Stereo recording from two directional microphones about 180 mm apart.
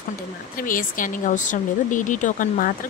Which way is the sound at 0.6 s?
50° left (ahead or behind).